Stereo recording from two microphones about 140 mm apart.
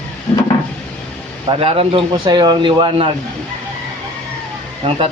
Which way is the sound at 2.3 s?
30° right (ahead or behind).